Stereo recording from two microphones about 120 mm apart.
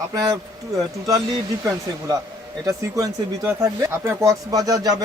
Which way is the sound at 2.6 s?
25° right (ahead or behind).